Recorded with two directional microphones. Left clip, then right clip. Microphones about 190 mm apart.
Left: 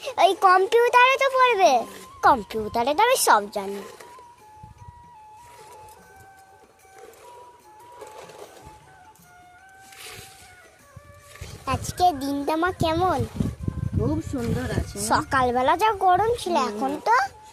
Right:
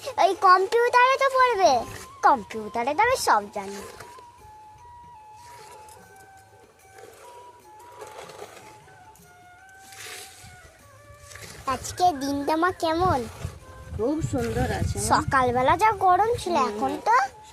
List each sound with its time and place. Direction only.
0.0 s a child's voice: 15° left (ahead or behind)
7.9 s printer: 10° right (ahead or behind)
10.0 s a sound: 20° right (ahead or behind)
11.6 s a child's voice: 15° left (ahead or behind)
14.5 s speech: 10° right (ahead or behind)
14.8 s a child's voice: 10° left (ahead or behind)